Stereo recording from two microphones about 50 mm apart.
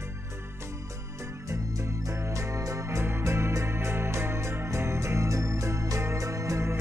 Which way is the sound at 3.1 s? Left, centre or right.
Right.